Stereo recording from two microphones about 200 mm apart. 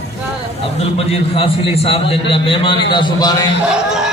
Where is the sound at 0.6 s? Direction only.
30° left (ahead or behind).